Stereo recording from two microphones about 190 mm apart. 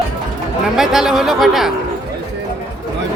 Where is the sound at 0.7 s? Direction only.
Centre (ahead or behind).